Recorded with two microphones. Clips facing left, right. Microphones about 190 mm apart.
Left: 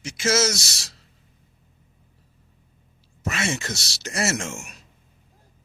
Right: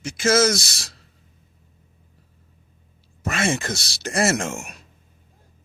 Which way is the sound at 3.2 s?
55° right (ahead or behind).